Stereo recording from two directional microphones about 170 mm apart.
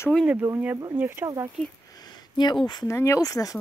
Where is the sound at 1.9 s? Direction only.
25° left (ahead or behind).